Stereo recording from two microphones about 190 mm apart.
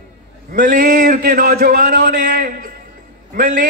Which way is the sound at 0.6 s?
45° right (ahead or behind).